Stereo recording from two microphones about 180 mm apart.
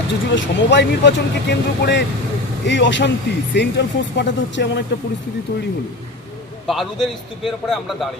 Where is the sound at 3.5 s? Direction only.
75° left (ahead or behind).